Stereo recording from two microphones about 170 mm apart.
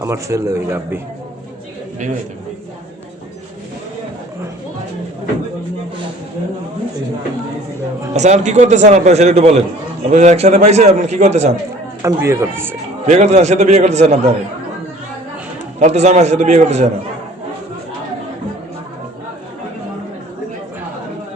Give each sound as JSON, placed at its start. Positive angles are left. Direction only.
{"t": 0.0, "sound": "a man's voice", "side_deg": -15}
{"t": 8.1, "sound": "a man's voice", "side_deg": -45}
{"t": 12.0, "sound": "a man's voice", "side_deg": -15}
{"t": 13.1, "sound": "a man's voice", "side_deg": -40}
{"t": 15.8, "sound": "a man's voice", "side_deg": -40}